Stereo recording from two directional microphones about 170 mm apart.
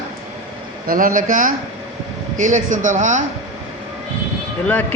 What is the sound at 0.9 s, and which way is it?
A man's voice, 55° right (ahead or behind).